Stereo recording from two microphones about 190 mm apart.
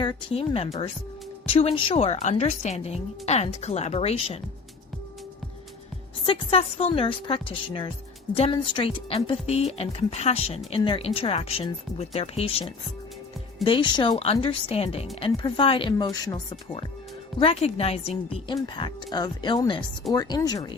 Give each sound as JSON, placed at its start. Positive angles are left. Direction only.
{"t": 0.0, "sound": "a woman's voice", "side_deg": 25}
{"t": 6.2, "sound": "a woman's voice", "side_deg": 30}